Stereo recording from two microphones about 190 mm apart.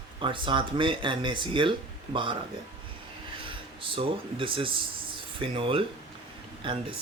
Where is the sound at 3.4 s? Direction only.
25° right (ahead or behind).